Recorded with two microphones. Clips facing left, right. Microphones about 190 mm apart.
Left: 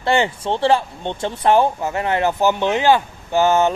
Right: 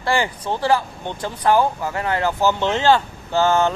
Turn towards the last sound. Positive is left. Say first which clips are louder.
# left 2 dB
turn(degrees=20)  # may be behind; listen again after turning